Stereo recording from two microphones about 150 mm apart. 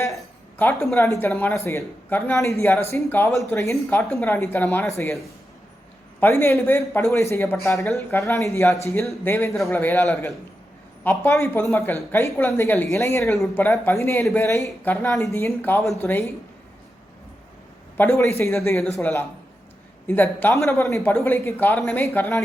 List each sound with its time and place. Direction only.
0.6 s speech: 15° left (ahead or behind)
6.1 s speech: 15° left (ahead or behind)
11.0 s speech: 15° left (ahead or behind)
17.9 s speech: 15° left (ahead or behind)